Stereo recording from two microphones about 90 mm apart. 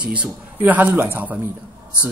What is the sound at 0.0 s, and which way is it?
Speech, 15° right (ahead or behind).